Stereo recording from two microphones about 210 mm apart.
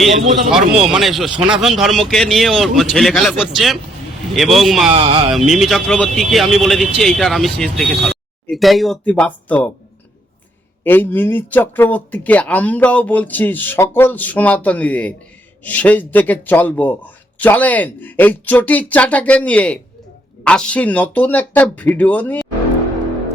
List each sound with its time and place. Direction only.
0.3 s a man's voice: 35° right (ahead or behind)
0.9 s speech: centre (ahead or behind)
4.9 s speech: 25° right (ahead or behind)
5.3 s speech: centre (ahead or behind)
10.8 s speech: 10° left (ahead or behind)